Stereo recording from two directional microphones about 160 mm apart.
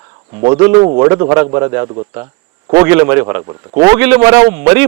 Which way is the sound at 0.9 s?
25° right (ahead or behind).